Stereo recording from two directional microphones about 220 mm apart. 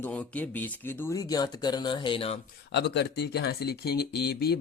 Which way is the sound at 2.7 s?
50° left (ahead or behind).